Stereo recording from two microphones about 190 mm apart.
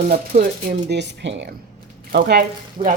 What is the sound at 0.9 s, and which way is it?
Speech, 65° right (ahead or behind).